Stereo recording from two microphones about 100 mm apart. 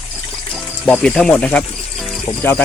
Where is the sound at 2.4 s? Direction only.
20° left (ahead or behind).